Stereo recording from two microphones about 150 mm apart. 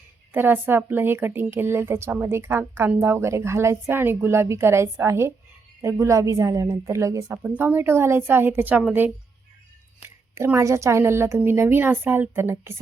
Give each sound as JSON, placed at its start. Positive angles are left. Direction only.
{"t": 0.3, "sound": "a woman's voice", "side_deg": -15}